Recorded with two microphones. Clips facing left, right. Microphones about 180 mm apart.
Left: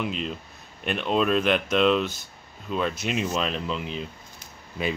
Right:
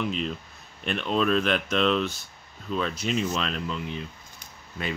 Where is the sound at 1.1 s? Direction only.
5° left (ahead or behind).